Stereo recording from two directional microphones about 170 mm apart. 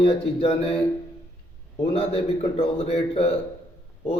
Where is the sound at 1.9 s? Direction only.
35° left (ahead or behind).